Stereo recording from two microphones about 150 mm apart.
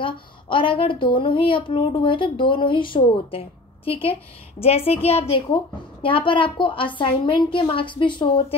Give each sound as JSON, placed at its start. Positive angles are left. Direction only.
{"t": 0.0, "sound": "speech", "side_deg": 35}